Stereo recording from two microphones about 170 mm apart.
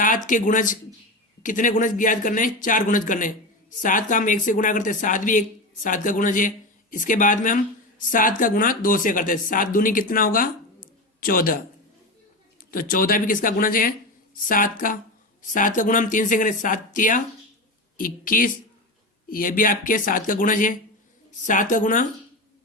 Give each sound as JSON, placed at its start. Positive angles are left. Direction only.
{"t": 0.0, "sound": "speech", "side_deg": 50}
{"t": 12.7, "sound": "speech", "side_deg": 55}